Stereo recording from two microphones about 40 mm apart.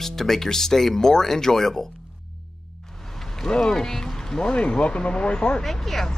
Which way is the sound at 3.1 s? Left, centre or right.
Centre.